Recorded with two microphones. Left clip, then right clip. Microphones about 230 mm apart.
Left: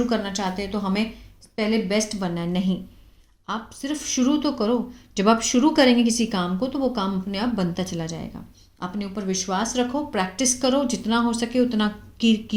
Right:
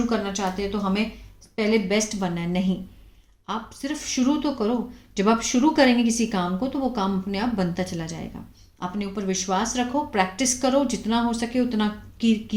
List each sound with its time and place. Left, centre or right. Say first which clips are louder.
0.1 s speech: even; left
1.5 s speech: right 1 dB; centre